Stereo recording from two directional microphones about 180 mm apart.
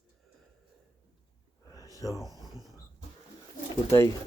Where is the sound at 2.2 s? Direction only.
20° right (ahead or behind).